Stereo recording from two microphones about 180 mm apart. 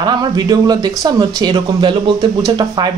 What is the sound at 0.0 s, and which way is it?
Speech, 25° right (ahead or behind).